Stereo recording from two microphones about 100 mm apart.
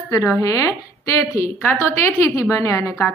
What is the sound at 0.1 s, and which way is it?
A woman's voice, 30° left (ahead or behind).